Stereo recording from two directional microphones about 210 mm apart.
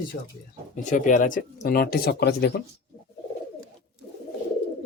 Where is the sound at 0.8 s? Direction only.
35° left (ahead or behind).